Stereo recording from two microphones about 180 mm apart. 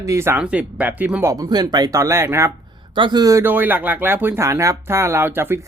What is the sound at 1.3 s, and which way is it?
Speech, 20° right (ahead or behind).